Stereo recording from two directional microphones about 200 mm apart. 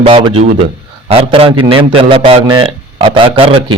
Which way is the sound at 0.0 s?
25° right (ahead or behind).